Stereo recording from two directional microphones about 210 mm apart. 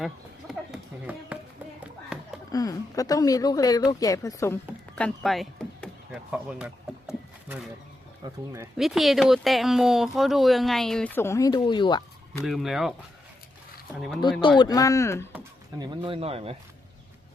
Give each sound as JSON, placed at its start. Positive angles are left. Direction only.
{"t": 0.0, "sound": "a sound", "side_deg": 0}
{"t": 2.5, "sound": "speech", "side_deg": 15}
{"t": 4.9, "sound": "speech", "side_deg": 5}
{"t": 8.2, "sound": "speech", "side_deg": -15}
{"t": 8.8, "sound": "speech", "side_deg": 0}
{"t": 12.5, "sound": "speech", "side_deg": 0}
{"t": 14.6, "sound": "speech", "side_deg": 15}
{"t": 15.8, "sound": "speech", "side_deg": -25}